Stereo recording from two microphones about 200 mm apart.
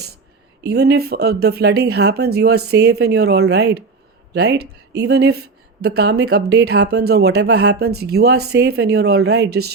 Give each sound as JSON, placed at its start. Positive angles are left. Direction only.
{"t": 0.6, "sound": "speech", "side_deg": -55}